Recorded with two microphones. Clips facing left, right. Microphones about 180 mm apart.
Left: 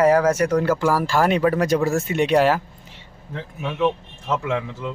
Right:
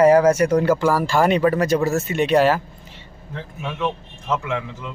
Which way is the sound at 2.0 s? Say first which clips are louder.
Even; 15° left (ahead or behind).